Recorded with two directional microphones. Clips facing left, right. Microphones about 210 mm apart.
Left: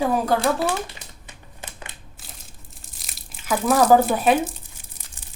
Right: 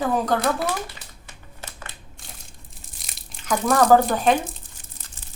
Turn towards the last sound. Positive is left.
turn(degrees=5)  # may be behind; listen again after turning